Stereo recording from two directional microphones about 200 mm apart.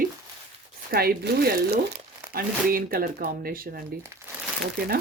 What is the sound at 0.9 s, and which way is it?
Speech, 50° right (ahead or behind).